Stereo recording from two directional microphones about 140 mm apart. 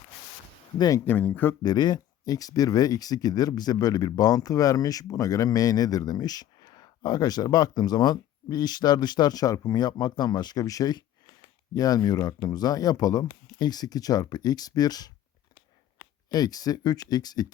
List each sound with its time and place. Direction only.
0.8 s speech: 25° left (ahead or behind)
1.0 s speech: 10° left (ahead or behind)
1.6 s speech: 30° left (ahead or behind)
16.3 s speech: 25° left (ahead or behind)